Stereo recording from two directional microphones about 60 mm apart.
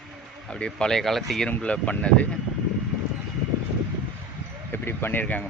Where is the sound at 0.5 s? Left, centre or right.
Centre.